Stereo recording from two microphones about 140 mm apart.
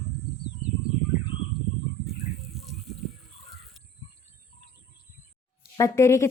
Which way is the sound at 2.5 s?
Centre (ahead or behind).